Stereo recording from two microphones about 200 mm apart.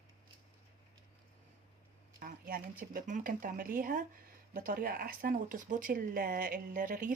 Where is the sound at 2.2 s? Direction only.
45° right (ahead or behind).